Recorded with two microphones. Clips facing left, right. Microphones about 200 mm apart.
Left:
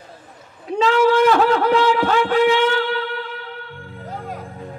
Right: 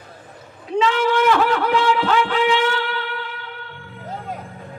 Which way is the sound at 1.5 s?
45° left (ahead or behind).